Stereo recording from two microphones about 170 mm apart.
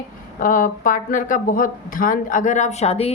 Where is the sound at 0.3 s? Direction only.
55° left (ahead or behind).